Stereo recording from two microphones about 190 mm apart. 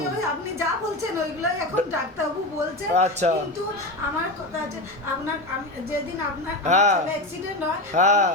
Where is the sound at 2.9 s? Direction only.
35° right (ahead or behind).